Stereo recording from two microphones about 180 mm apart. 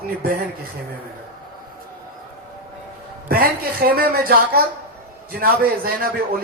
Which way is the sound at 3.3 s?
55° right (ahead or behind).